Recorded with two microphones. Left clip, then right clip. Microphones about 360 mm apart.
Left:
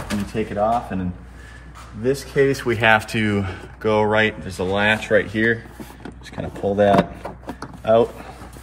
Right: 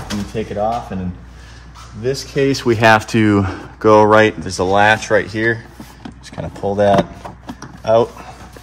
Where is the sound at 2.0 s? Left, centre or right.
Centre.